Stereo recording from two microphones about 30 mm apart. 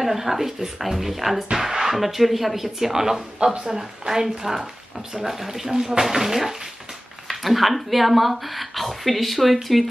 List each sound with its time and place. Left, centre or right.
0.0 s speech: centre
1.5 s speech: centre